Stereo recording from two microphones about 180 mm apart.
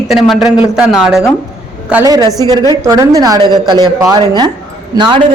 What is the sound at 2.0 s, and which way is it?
Speech, 20° right (ahead or behind).